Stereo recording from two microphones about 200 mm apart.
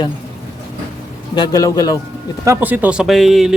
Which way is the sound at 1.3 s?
20° left (ahead or behind).